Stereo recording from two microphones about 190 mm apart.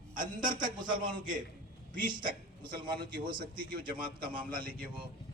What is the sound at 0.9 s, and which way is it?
Speech, 45° right (ahead or behind).